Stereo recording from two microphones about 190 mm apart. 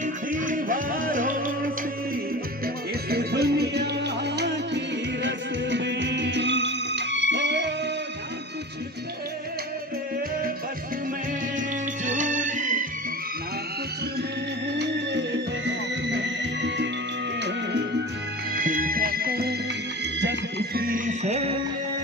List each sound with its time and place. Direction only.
0.0 s music: 45° right (ahead or behind)
3.1 s music: 55° right (ahead or behind)
12.0 s music: 40° right (ahead or behind)
14.8 s music: 65° right (ahead or behind)
18.5 s music: 45° right (ahead or behind)